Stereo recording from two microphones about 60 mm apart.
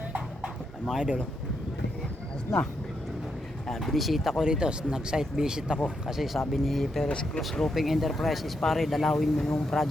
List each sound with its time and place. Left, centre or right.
0.9 s speech: centre
3.7 s speech: centre
7.1 s speech: centre
7.7 s speech: centre